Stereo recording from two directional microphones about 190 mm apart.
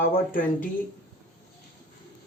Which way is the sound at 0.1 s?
45° left (ahead or behind).